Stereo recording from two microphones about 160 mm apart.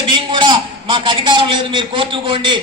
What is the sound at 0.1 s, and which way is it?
A man's voice, 30° right (ahead or behind).